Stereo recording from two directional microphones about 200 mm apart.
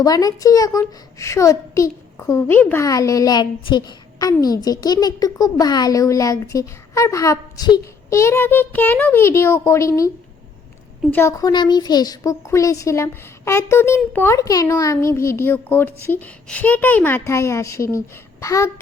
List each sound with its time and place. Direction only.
0.0 s a woman's voice: 20° left (ahead or behind)